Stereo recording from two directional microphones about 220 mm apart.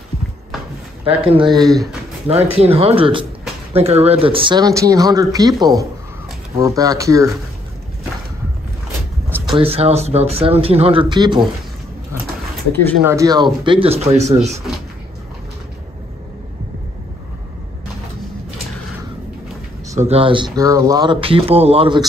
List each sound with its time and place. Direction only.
1.0 s speech: 25° right (ahead or behind)
9.5 s speech: 25° right (ahead or behind)
13.0 s speech: 15° right (ahead or behind); by 14.5 s 30° right (ahead or behind)
20.0 s speech: 25° right (ahead or behind)